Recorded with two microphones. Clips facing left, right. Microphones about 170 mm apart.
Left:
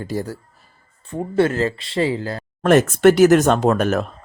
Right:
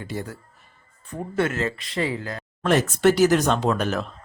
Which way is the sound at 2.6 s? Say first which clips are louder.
Left 6 dB; 50° left (ahead or behind).